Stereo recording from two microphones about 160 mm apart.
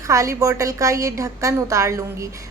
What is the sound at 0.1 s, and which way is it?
A woman's voice, 20° right (ahead or behind).